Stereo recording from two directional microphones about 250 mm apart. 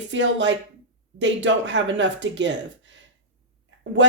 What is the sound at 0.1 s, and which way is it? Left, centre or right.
Speech, right.